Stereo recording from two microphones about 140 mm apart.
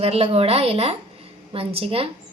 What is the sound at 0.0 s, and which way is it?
A woman's voice, 45° right (ahead or behind).